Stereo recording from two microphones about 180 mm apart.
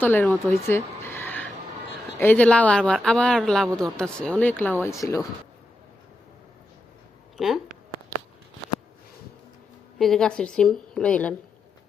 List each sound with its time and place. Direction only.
0.0 s a woman's voice: 10° left (ahead or behind)
7.3 s speech: centre (ahead or behind)
10.0 s speech: 5° left (ahead or behind)